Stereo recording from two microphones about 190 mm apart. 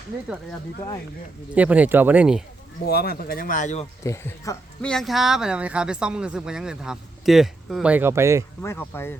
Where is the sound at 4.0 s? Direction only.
15° left (ahead or behind).